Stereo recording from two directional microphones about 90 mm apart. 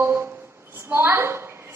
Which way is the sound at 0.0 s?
25° right (ahead or behind).